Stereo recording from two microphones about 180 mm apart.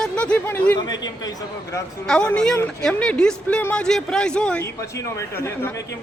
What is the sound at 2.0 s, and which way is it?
Speech, 5° left (ahead or behind).